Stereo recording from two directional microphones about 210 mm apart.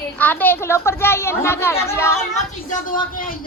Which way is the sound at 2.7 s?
40° left (ahead or behind).